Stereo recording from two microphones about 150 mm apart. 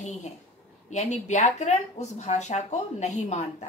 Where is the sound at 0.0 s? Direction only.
50° left (ahead or behind).